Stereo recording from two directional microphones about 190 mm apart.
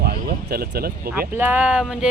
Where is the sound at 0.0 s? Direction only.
55° right (ahead or behind).